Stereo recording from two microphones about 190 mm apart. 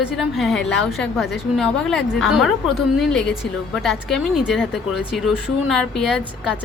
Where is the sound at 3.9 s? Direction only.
Centre (ahead or behind).